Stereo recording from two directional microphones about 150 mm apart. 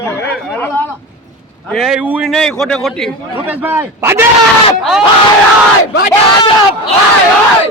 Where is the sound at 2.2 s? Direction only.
Centre (ahead or behind).